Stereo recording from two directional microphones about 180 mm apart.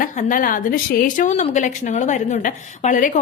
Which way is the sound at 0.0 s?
50° left (ahead or behind).